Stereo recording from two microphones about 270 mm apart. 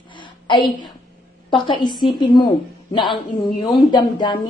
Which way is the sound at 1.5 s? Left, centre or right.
Centre.